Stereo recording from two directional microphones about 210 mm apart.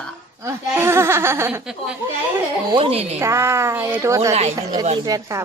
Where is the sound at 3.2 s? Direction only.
10° right (ahead or behind).